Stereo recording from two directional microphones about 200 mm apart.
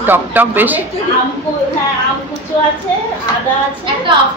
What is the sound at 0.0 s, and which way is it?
Speech, 10° right (ahead or behind).